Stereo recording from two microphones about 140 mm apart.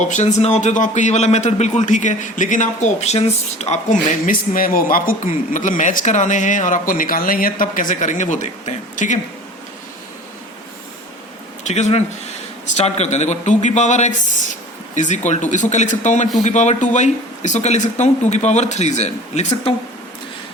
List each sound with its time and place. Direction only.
0.0 s a man's voice: 60° left (ahead or behind)
4.1 s a man's voice: 85° left; by 9.1 s 60° left (ahead or behind)
11.7 s a man's voice: 50° left (ahead or behind)